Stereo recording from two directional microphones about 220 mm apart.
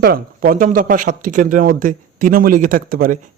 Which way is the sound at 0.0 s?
40° right (ahead or behind).